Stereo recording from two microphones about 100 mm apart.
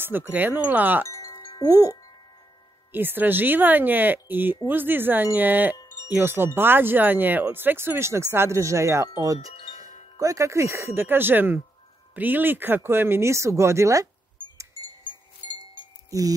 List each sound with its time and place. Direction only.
0.3 s speech: 15° right (ahead or behind)
1.0 s chime: 35° left (ahead or behind)
1.7 s speech: 25° right (ahead or behind)
16.1 s speech: 35° right (ahead or behind)